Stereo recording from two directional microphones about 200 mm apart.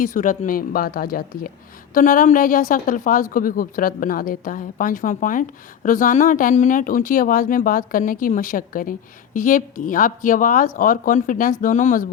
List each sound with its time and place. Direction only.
0.0 s a woman's voice: 40° left (ahead or behind)